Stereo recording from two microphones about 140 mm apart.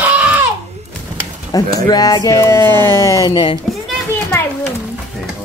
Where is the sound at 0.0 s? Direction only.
10° right (ahead or behind).